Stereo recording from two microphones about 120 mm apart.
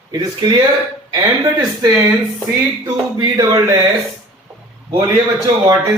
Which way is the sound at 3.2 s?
30° right (ahead or behind).